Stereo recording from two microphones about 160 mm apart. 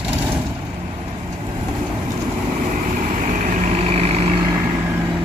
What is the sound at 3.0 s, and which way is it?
Vehicle, 50° right (ahead or behind).